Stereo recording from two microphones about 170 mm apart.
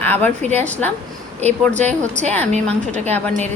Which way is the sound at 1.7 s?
40° right (ahead or behind).